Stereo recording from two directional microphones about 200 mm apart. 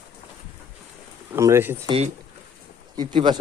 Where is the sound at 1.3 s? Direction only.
10° right (ahead or behind).